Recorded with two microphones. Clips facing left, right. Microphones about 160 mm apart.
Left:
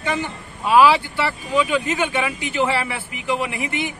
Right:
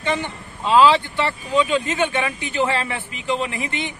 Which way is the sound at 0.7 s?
10° left (ahead or behind).